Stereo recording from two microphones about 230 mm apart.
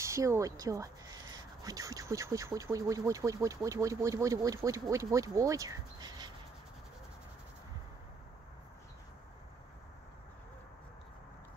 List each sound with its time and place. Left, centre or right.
0.0 s speech: centre